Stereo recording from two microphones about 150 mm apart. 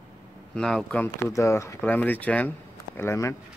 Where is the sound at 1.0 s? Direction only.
20° left (ahead or behind).